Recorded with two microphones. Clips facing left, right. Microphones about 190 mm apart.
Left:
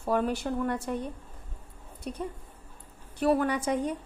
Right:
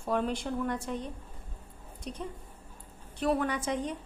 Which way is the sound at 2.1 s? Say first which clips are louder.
Left 4 dB; 50° left (ahead or behind).